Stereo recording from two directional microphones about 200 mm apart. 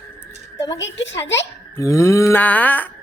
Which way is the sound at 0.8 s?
65° left (ahead or behind).